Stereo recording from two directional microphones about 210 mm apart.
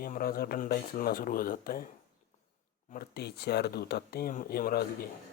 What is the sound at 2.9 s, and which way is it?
Speech, 50° left (ahead or behind).